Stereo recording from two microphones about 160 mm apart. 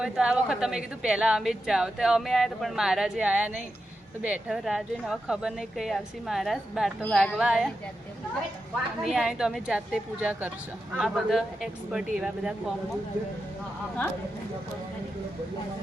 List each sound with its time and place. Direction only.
0.0 s a woman's voice: 5° right (ahead or behind)
9.0 s a woman's voice: centre (ahead or behind)